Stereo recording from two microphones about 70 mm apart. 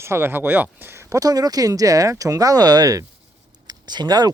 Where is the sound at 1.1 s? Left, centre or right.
Right.